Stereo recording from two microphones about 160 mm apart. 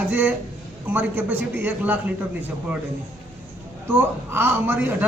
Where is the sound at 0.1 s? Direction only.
10° right (ahead or behind).